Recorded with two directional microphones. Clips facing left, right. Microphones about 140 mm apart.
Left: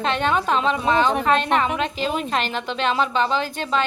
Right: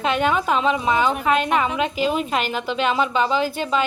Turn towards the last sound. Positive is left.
turn(degrees=-10)  # may be behind; listen again after turning